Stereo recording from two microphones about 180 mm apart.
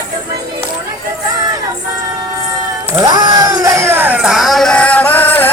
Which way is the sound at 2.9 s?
25° right (ahead or behind).